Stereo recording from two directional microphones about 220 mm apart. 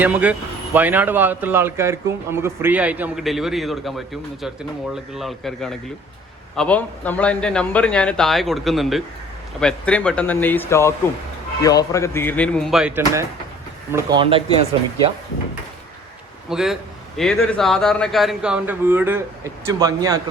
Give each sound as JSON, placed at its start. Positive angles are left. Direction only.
{"t": 0.0, "sound": "speech", "side_deg": -5}
{"t": 13.9, "sound": "speech", "side_deg": -20}
{"t": 16.5, "sound": "speech", "side_deg": 0}